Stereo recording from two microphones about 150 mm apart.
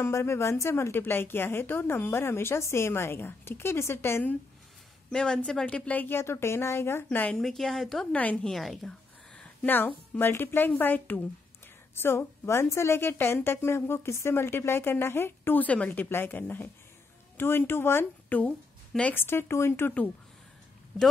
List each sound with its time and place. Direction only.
0.0 s a woman's voice: 15° left (ahead or behind)